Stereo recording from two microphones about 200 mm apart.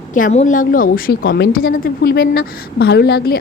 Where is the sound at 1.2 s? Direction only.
60° left (ahead or behind).